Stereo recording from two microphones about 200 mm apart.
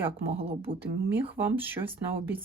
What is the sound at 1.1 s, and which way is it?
Speech, 10° right (ahead or behind).